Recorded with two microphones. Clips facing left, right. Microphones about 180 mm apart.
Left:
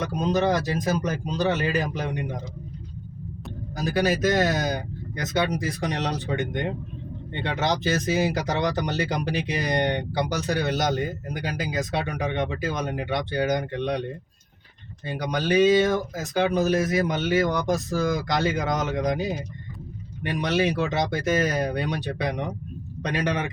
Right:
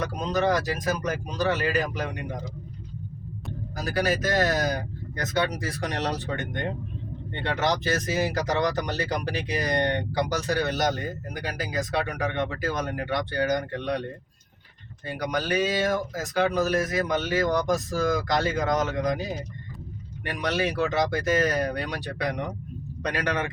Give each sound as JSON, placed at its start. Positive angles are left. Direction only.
{"t": 0.0, "sound": "speech", "side_deg": 25}
{"t": 3.8, "sound": "speech", "side_deg": 20}
{"t": 8.2, "sound": "speech", "side_deg": 20}
{"t": 15.0, "sound": "speech", "side_deg": 25}
{"t": 20.2, "sound": "speech", "side_deg": 20}